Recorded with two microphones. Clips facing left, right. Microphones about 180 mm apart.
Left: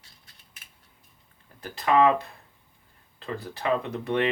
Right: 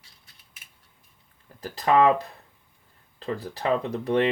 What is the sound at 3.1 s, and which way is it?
Speech, 35° right (ahead or behind).